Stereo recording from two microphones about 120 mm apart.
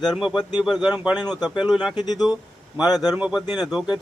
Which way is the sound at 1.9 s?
35° left (ahead or behind).